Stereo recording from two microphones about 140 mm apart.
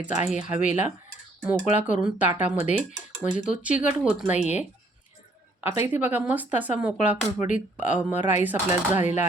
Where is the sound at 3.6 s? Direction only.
10° right (ahead or behind).